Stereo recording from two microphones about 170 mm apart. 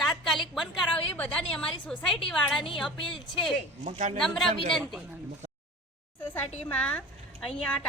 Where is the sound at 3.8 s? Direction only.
45° right (ahead or behind).